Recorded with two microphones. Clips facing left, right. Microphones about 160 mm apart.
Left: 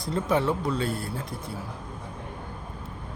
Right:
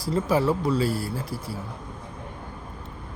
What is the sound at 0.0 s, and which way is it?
Speech, 5° right (ahead or behind).